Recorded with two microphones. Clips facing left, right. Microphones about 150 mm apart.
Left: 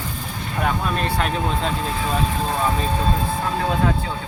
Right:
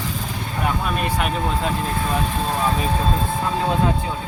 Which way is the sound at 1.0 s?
10° right (ahead or behind).